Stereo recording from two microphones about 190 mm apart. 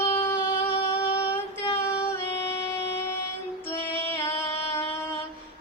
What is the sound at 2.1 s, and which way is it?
Music, 10° left (ahead or behind).